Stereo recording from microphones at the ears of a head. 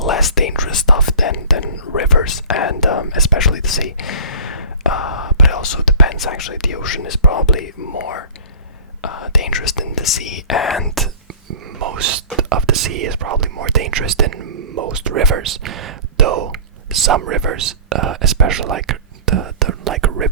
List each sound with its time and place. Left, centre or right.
0.0 s whispering: left
11.5 s whispering: right